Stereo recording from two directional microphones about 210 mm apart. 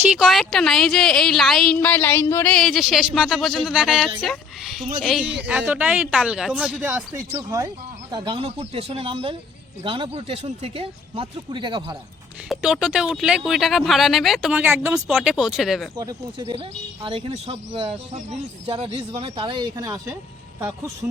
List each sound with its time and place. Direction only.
0.1 s a woman's voice: centre (ahead or behind); by 11.9 s 20° right (ahead or behind)
12.5 s a woman's voice: centre (ahead or behind)
16.0 s speech: 15° right (ahead or behind)